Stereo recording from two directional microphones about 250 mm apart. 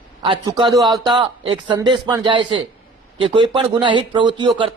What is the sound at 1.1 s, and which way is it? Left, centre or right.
A man's voice, right.